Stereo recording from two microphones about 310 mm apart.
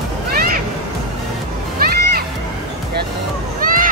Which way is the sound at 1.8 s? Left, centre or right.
Right.